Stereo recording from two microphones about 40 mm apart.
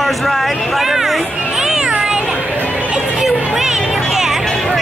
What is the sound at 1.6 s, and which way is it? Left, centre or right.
Cat, centre.